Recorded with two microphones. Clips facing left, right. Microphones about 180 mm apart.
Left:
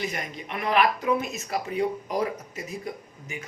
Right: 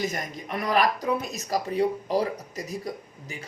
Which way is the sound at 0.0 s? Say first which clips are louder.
Right 2 dB; 40° right (ahead or behind).